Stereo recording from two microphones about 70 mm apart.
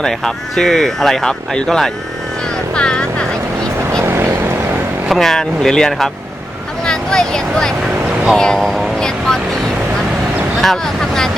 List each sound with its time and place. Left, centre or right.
0.0 s speech: centre
2.7 s vehicle: centre
4.0 s vehicle: right
5.0 s speech: centre
10.6 s speech: centre